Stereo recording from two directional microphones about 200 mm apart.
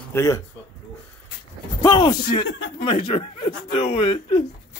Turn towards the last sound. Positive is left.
turn(degrees=30)  # may be behind; listen again after turning